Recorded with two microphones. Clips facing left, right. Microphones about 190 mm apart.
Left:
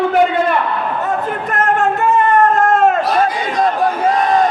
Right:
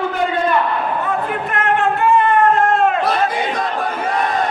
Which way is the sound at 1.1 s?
45° left (ahead or behind).